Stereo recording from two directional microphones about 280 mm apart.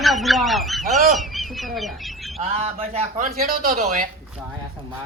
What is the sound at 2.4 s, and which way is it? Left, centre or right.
Speech, right.